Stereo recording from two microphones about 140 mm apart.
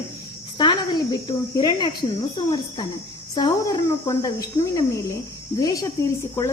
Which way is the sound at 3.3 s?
30° left (ahead or behind).